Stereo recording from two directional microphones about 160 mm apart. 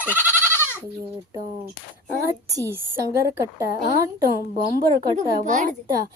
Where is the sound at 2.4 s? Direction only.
20° right (ahead or behind).